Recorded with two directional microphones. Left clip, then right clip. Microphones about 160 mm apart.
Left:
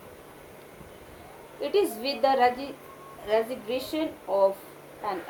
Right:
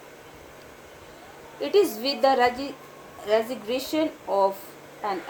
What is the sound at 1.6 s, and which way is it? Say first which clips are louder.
A woman's voice: right 4 dB; 60° right (ahead or behind).